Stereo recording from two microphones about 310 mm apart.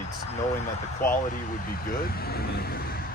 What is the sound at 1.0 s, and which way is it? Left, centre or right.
Speech, left.